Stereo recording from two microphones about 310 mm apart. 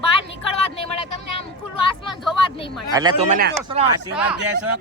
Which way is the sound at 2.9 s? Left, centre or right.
Centre.